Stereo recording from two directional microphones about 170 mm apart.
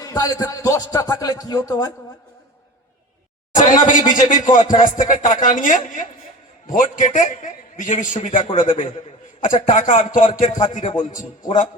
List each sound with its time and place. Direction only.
0.0 s speech: 20° left (ahead or behind)
3.5 s a man's voice: 50° left (ahead or behind)